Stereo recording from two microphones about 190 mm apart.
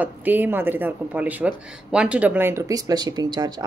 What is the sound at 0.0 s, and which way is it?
A woman's voice, 10° right (ahead or behind).